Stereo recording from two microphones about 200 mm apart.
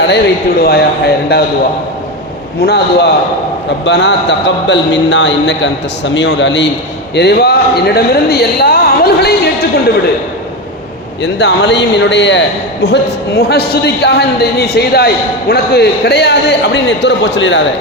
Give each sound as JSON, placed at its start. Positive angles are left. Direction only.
{"t": 0.6, "sound": "speech", "side_deg": 50}
{"t": 2.6, "sound": "a man's voice", "side_deg": 55}
{"t": 11.2, "sound": "a man's voice", "side_deg": 60}